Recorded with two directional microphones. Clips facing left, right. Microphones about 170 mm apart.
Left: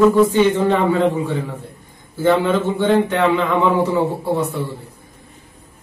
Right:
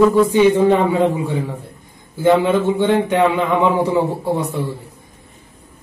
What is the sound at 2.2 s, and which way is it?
A man's voice, 15° right (ahead or behind).